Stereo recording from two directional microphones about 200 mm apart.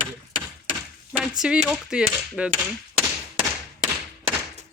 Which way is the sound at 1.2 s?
Centre (ahead or behind).